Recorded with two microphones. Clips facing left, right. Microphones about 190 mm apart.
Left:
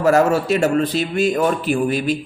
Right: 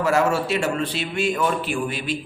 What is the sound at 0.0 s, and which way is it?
A man's voice, 40° left (ahead or behind).